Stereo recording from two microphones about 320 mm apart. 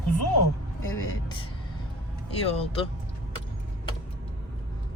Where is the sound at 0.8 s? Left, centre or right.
Centre.